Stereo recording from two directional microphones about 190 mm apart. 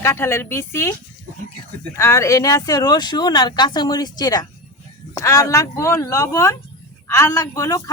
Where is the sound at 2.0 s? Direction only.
15° left (ahead or behind).